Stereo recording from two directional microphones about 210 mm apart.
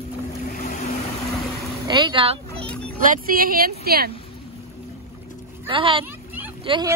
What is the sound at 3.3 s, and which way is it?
Speech, 45° right (ahead or behind).